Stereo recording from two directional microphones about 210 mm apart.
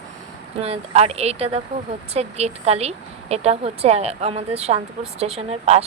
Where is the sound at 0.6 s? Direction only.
30° right (ahead or behind).